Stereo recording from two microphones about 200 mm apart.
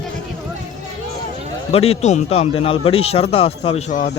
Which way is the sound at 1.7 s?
30° left (ahead or behind).